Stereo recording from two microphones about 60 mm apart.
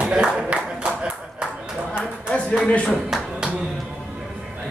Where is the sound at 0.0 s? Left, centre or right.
Centre.